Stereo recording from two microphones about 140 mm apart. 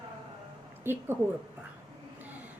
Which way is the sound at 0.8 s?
15° right (ahead or behind).